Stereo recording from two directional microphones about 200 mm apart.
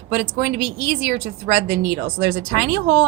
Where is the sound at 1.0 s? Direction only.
55° right (ahead or behind).